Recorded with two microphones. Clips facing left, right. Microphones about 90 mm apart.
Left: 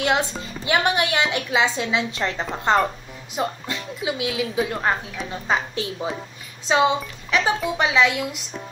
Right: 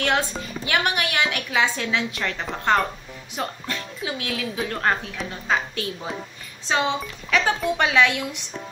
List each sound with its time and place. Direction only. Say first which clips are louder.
0.0 s a woman's voice: left 1 dB; 20° left (ahead or behind)
6.7 s speech: left 4 dB; 15° left (ahead or behind)